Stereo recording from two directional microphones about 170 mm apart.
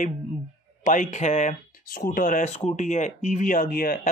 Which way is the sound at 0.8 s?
45° left (ahead or behind).